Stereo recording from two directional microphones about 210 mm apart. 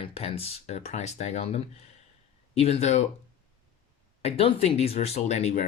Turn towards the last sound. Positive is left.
turn(degrees=30)  # may be behind; listen again after turning